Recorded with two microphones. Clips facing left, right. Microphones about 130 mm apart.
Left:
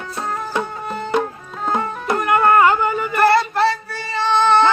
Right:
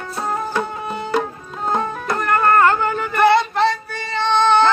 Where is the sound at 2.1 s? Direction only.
15° left (ahead or behind).